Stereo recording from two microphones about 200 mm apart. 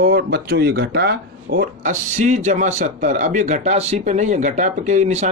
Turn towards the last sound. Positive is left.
turn(degrees=-35)  # may be behind; listen again after turning